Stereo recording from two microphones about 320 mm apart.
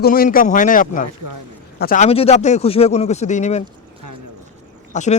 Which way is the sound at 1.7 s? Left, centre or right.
Left.